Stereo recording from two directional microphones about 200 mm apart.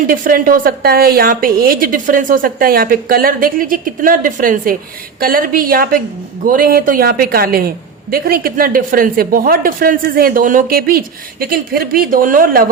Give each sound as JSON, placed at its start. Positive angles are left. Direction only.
{"t": 0.1, "sound": "a woman's voice", "side_deg": -45}